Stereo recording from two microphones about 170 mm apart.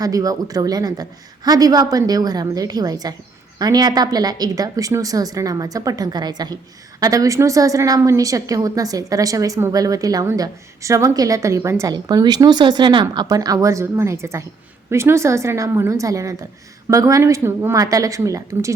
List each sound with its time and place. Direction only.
0.0 s a woman's voice: 20° right (ahead or behind)